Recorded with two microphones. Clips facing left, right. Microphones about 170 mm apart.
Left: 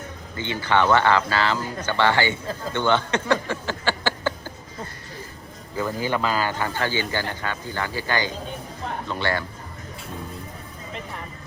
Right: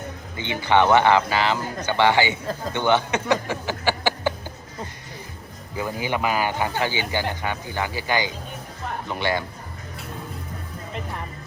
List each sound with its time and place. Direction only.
0.3 s speech: 20° right (ahead or behind)
5.7 s speech: 15° right (ahead or behind)